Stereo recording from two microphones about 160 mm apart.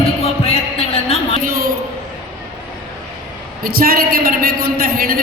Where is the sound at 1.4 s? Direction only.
65° right (ahead or behind).